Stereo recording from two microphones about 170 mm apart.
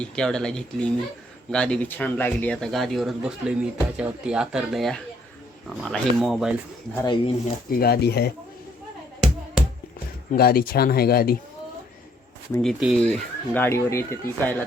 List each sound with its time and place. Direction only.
0.0 s speech: 5° left (ahead or behind)
7.0 s speech: 25° left (ahead or behind)
7.7 s speech: 65° left (ahead or behind)
10.3 s speech: 60° left (ahead or behind)
12.6 s speech: centre (ahead or behind); by 14.5 s 15° left (ahead or behind)